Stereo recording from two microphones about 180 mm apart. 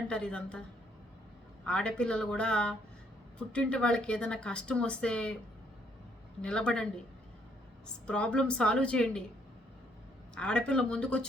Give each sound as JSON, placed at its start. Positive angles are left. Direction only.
{"t": 0.1, "sound": "speech", "side_deg": 5}
{"t": 1.6, "sound": "speech", "side_deg": 5}
{"t": 6.4, "sound": "speech", "side_deg": 5}
{"t": 8.0, "sound": "speech", "side_deg": 5}
{"t": 10.3, "sound": "speech", "side_deg": 5}